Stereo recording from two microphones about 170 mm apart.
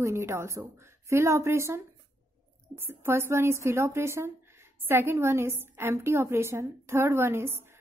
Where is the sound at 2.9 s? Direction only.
15° right (ahead or behind).